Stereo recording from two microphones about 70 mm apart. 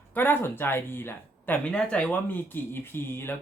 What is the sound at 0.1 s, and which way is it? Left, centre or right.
Speech, left.